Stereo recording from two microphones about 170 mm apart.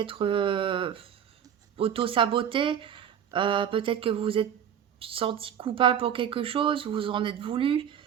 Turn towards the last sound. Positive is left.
turn(degrees=-30)  # may be behind; listen again after turning